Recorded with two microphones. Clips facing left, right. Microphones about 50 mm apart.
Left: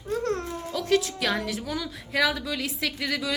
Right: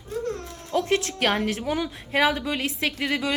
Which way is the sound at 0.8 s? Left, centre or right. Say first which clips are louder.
Left 2 dB; right.